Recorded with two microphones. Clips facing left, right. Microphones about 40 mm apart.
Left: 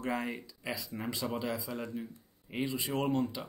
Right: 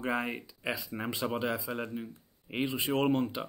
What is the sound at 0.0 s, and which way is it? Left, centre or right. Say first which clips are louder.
Speech: right 2 dB; right.